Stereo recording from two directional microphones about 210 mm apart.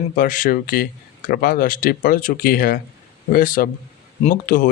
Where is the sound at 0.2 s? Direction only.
40° left (ahead or behind).